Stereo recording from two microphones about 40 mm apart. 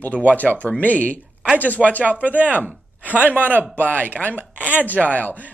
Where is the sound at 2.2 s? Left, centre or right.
Right.